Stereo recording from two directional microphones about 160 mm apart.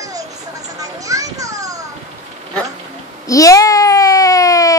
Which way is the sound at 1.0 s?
20° right (ahead or behind).